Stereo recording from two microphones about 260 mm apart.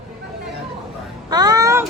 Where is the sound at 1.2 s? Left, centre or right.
Centre.